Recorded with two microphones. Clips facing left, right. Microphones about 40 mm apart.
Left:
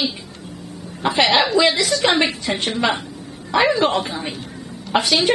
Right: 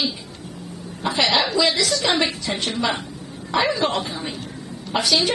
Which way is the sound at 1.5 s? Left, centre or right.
Centre.